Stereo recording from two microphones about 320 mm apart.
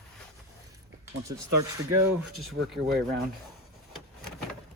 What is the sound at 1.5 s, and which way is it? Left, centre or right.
Speech, right.